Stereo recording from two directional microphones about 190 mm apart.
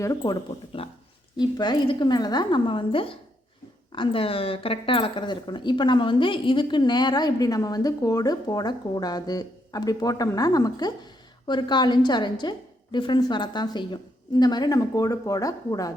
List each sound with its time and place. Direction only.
0.0 s speech: 20° left (ahead or behind)